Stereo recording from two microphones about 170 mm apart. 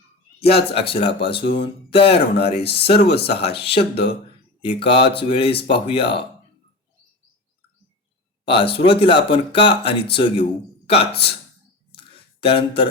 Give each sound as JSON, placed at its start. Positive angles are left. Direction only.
{"t": 0.4, "sound": "speech", "side_deg": 35}
{"t": 2.6, "sound": "speech", "side_deg": 75}
{"t": 2.8, "sound": "speech", "side_deg": 35}
{"t": 3.8, "sound": "speech", "side_deg": 75}
{"t": 4.6, "sound": "speech", "side_deg": 30}
{"t": 8.4, "sound": "speech", "side_deg": 30}
{"t": 11.1, "sound": "speech", "side_deg": 75}
{"t": 11.9, "sound": "a sound", "side_deg": 30}